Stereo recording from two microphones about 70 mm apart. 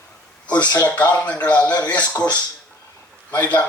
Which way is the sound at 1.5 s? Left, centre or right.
Left.